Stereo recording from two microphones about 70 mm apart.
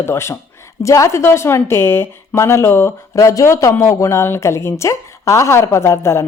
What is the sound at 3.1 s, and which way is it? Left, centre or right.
A woman's voice, left.